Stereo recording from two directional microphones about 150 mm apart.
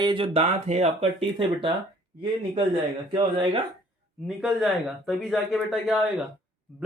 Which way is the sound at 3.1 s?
35° right (ahead or behind).